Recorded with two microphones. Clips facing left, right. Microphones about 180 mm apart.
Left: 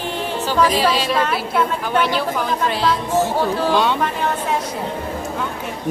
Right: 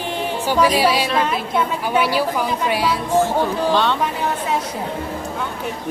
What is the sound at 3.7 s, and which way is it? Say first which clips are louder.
Speech: left 1 dB; 10° left (ahead or behind).